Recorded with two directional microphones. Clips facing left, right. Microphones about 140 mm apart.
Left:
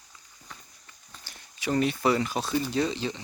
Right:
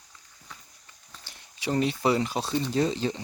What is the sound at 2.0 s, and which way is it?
Speech, 25° right (ahead or behind).